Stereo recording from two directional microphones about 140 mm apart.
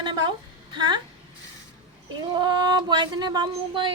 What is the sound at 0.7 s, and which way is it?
Speech, 30° right (ahead or behind).